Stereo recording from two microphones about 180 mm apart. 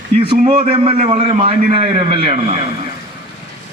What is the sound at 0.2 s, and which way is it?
A man's voice, 30° right (ahead or behind).